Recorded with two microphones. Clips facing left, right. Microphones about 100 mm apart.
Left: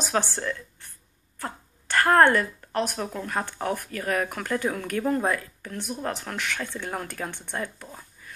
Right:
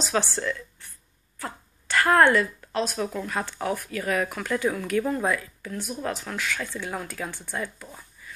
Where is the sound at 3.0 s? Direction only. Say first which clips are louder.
Right 1 dB; 35° left (ahead or behind).